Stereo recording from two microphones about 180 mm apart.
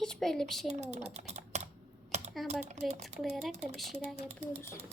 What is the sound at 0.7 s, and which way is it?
Speech, 40° right (ahead or behind).